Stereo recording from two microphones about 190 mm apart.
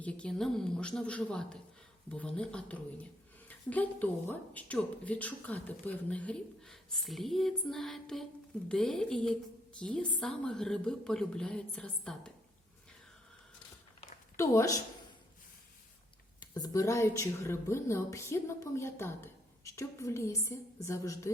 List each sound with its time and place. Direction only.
0.0 s a woman's voice: 5° left (ahead or behind)
14.3 s speech: 15° left (ahead or behind)
16.4 s speech: 20° left (ahead or behind)